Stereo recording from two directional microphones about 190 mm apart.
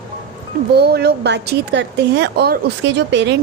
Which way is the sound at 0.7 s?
60° right (ahead or behind).